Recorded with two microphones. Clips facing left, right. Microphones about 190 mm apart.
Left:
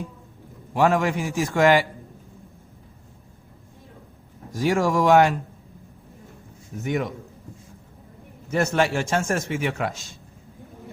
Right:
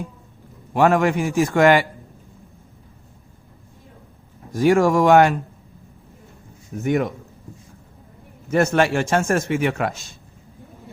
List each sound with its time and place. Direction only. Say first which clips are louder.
0.7 s speech: right 3 dB; 60° right (ahead or behind)
4.5 s speech: right 5 dB; 55° right (ahead or behind)
6.8 s speech: right 5 dB; 50° right (ahead or behind)
8.4 s speech: right 4 dB; 55° right (ahead or behind)